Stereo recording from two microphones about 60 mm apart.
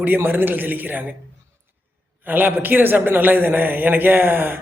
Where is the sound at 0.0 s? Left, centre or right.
Right.